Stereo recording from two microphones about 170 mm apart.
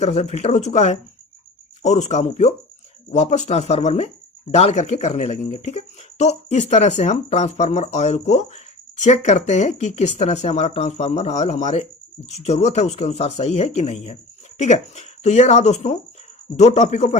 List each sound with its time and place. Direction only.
0.0 s speech: 40° left (ahead or behind)